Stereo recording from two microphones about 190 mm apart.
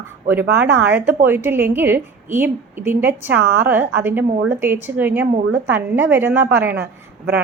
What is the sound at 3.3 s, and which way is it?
Speech, 55° right (ahead or behind).